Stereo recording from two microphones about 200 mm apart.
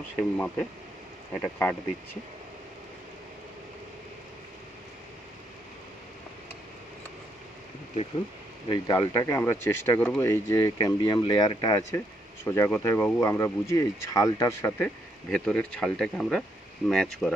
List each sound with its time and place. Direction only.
0.2 s speech: 5° left (ahead or behind)
8.7 s speech: 15° left (ahead or behind)